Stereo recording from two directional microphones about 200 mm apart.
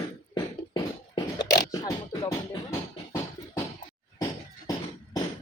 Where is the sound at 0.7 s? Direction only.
20° left (ahead or behind).